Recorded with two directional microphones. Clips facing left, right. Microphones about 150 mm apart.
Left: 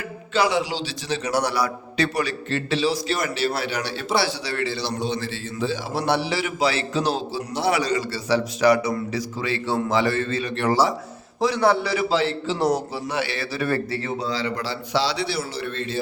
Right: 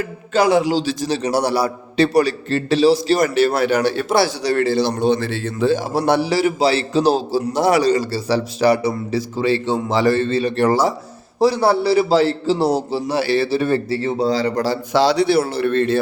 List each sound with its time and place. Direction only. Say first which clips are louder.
0.3 s a man's voice: right 7 dB; 50° right (ahead or behind)